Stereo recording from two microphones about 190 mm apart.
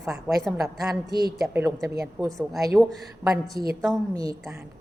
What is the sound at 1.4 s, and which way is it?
Speech, 10° right (ahead or behind).